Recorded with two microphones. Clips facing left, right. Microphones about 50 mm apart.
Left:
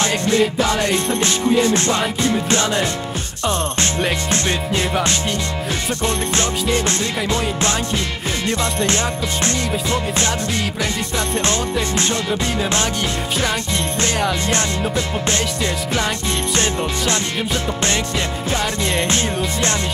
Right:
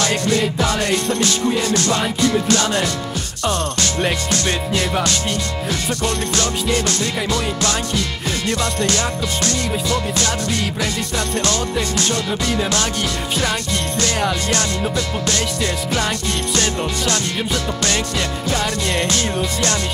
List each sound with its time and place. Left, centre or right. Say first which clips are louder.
0.0 s music: left 1 dB; left
6.0 s music: left 1 dB; left
14.5 s music: even; left
18.6 s music: left 1 dB; left